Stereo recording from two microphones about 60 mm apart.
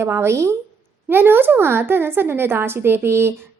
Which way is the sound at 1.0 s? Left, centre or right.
Right.